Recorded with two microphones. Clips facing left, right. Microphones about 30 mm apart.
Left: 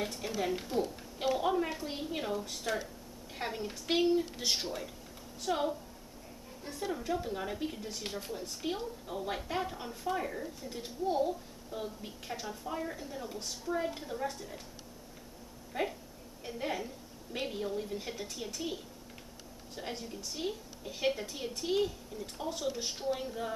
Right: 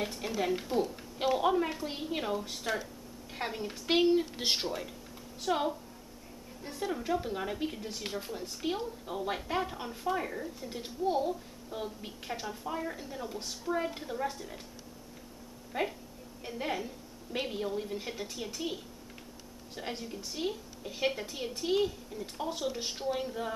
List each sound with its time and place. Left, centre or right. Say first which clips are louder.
0.0 s a woman's voice: right 2 dB; centre
3.9 s speech: right 3 dB; right
4.6 s a woman's voice: right 2 dB; centre
15.7 s a woman's voice: right 1 dB; centre